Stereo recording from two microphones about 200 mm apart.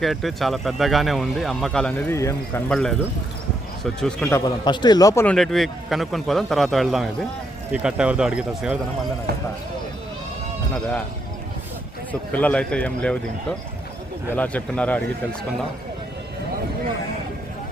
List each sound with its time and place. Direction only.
0.0 s speech: centre (ahead or behind)
4.3 s a man's voice: 15° left (ahead or behind)
5.2 s speech: 5° left (ahead or behind)
12.3 s speech: 5° left (ahead or behind)
14.3 s speech: 5° left (ahead or behind)